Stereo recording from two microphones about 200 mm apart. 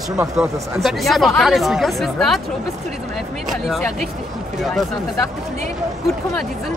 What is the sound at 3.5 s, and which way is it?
Speech, centre (ahead or behind).